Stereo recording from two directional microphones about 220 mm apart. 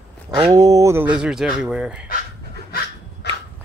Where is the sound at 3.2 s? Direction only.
50° left (ahead or behind).